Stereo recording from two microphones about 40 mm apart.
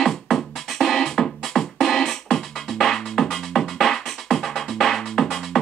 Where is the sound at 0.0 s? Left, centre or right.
Centre.